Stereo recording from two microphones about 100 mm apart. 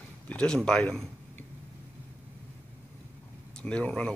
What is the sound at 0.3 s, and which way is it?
Speech, 10° left (ahead or behind).